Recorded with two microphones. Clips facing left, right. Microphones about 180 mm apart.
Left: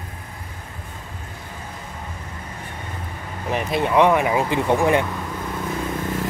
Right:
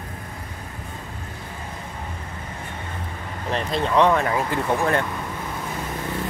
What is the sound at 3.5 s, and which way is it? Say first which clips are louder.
Speech: left 2 dB; 10° left (ahead or behind).